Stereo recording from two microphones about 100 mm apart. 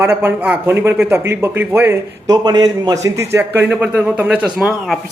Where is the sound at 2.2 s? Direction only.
40° right (ahead or behind); by 3.6 s 25° right (ahead or behind).